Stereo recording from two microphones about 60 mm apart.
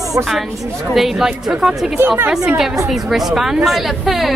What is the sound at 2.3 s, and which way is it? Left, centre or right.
A woman's voice, centre.